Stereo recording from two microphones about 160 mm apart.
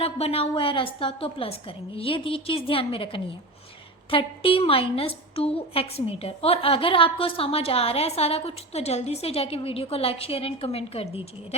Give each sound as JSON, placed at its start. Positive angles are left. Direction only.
{"t": 0.0, "sound": "a woman's voice", "side_deg": 40}